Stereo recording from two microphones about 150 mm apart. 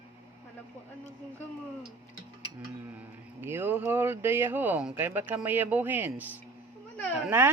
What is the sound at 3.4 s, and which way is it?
Speech, 15° right (ahead or behind).